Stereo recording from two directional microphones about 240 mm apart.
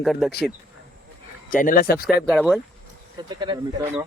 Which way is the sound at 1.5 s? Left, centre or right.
Left.